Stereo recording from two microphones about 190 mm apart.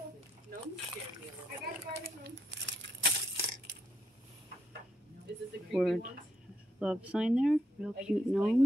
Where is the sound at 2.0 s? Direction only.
65° right (ahead or behind).